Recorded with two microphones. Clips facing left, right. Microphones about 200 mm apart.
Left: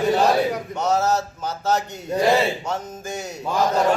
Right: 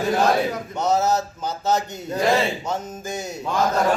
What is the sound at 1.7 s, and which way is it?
A man's voice, 5° left (ahead or behind).